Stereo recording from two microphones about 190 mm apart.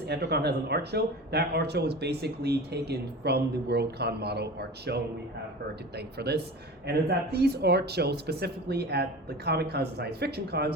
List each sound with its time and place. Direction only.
0.1 s speech: 60° right (ahead or behind)
6.1 s speech: 60° right (ahead or behind)